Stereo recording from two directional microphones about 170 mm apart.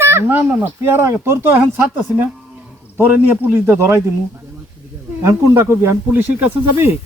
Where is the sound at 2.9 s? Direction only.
10° right (ahead or behind).